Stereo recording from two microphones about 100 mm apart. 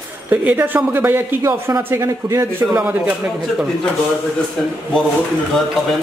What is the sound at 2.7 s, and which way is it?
Speech, 15° right (ahead or behind).